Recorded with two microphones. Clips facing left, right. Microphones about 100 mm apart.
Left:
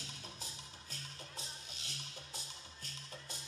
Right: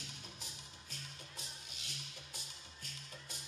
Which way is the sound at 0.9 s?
35° left (ahead or behind).